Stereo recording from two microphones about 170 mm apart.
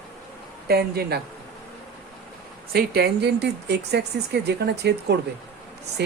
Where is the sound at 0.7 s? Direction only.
70° right (ahead or behind).